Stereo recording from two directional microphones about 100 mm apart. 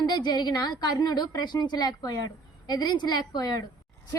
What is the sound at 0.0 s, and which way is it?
A woman's voice, 45° left (ahead or behind).